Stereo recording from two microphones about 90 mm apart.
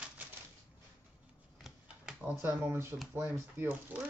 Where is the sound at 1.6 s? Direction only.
5° right (ahead or behind).